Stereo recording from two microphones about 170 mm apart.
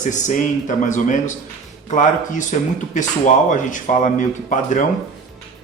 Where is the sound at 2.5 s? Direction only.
50° left (ahead or behind).